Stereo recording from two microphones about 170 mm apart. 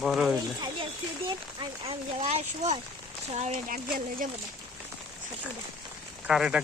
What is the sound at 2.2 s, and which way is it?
Speech, 40° right (ahead or behind).